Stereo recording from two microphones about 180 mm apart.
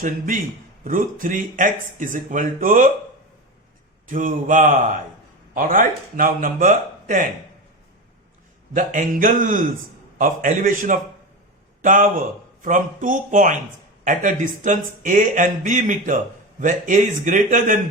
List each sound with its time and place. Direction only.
0.9 s speech: 50° right (ahead or behind)
4.1 s speech: 50° right (ahead or behind)
8.7 s a man's voice: 45° right (ahead or behind)